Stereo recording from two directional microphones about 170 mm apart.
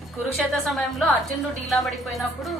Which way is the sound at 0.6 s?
Centre (ahead or behind).